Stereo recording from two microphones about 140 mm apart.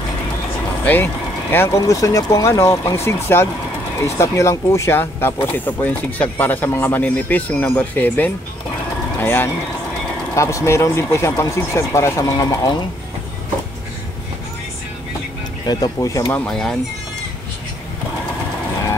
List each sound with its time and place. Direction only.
0.8 s speech: 15° left (ahead or behind)
15.6 s speech: 30° left (ahead or behind)
16.4 s speech: 5° left (ahead or behind)